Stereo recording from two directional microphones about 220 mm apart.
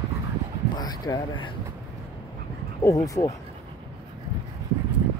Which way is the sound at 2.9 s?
15° left (ahead or behind).